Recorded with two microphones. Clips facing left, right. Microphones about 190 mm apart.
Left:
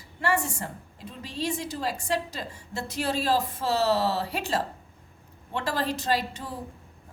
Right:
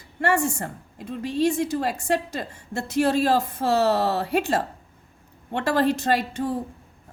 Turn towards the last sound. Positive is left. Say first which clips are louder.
# right 5 dB
turn(degrees=-55)  # may be behind; listen again after turning